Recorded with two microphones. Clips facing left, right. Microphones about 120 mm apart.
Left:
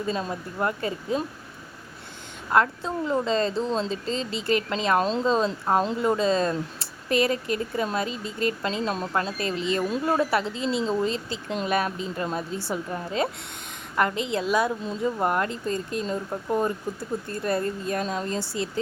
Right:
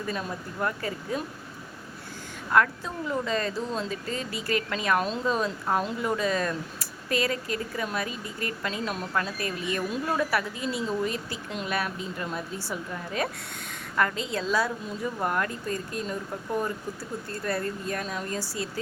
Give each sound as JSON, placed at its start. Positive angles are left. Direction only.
{"t": 0.0, "sound": "speech", "side_deg": 25}
{"t": 2.5, "sound": "speech", "side_deg": 25}